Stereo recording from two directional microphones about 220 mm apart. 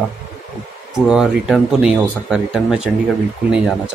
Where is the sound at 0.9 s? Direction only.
5° right (ahead or behind).